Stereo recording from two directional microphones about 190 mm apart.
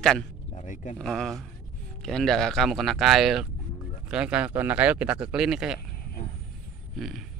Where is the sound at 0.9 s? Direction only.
Centre (ahead or behind).